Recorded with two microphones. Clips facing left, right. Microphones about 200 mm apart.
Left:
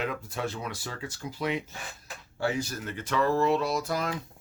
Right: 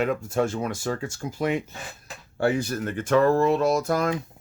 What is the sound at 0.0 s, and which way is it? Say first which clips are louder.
Speech: right 8 dB; 50° right (ahead or behind).